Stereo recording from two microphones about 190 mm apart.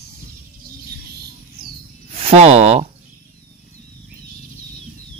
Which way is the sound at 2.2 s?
35° right (ahead or behind).